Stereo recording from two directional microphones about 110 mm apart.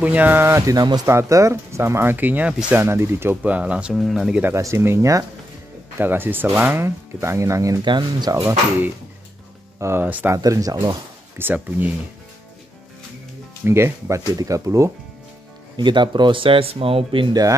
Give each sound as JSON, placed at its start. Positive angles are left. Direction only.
{"t": 0.0, "sound": "speech", "side_deg": -15}
{"t": 2.8, "sound": "speech", "side_deg": -25}
{"t": 4.6, "sound": "speech", "side_deg": -25}
{"t": 7.8, "sound": "speech", "side_deg": -40}
{"t": 9.8, "sound": "speech", "side_deg": -20}
{"t": 10.3, "sound": "speech", "side_deg": -30}
{"t": 11.3, "sound": "speech", "side_deg": -15}
{"t": 13.7, "sound": "speech", "side_deg": -25}
{"t": 15.7, "sound": "speech", "side_deg": -45}